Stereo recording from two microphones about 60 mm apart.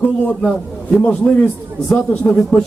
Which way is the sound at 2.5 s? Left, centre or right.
Centre.